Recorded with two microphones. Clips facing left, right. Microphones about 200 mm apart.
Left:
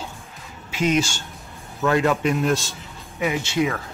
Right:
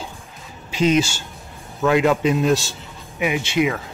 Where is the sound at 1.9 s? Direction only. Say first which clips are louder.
Right 3 dB; 20° right (ahead or behind).